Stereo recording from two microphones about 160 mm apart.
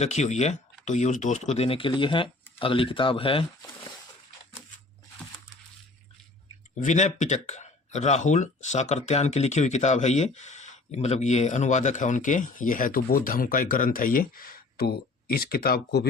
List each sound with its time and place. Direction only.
0.0 s speech: 45° left (ahead or behind)
6.8 s speech: 50° left (ahead or behind); by 16.0 s 80° left